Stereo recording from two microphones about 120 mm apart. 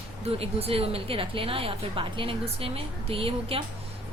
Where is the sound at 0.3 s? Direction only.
55° right (ahead or behind).